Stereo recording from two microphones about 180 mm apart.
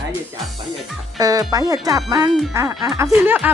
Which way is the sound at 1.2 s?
20° right (ahead or behind).